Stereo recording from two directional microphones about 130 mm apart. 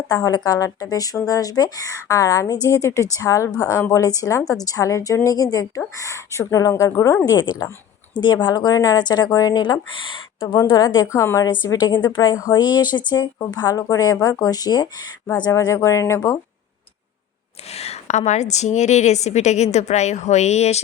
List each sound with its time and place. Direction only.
0.1 s a woman's voice: 30° left (ahead or behind)
10.7 s a woman's voice: 25° left (ahead or behind)
11.7 s a woman's voice: 35° left (ahead or behind)
17.7 s a woman's voice: 55° left (ahead or behind)